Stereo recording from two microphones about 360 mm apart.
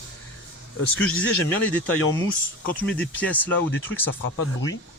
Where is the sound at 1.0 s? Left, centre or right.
Centre.